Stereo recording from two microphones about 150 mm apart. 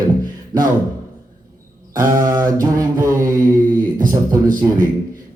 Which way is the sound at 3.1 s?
65° right (ahead or behind).